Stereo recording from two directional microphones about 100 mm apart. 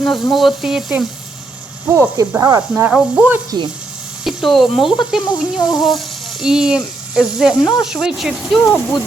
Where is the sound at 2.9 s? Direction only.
10° right (ahead or behind); by 9.0 s 5° left (ahead or behind).